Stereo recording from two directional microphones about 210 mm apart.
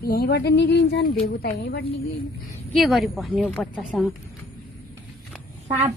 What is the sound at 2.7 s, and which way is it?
A woman's voice, centre (ahead or behind).